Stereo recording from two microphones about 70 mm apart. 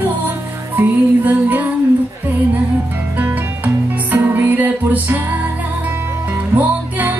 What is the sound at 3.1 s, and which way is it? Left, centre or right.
Music, right.